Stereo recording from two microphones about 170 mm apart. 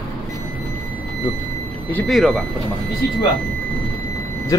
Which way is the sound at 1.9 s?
5° left (ahead or behind).